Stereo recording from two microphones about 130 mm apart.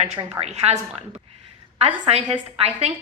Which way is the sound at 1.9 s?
50° right (ahead or behind).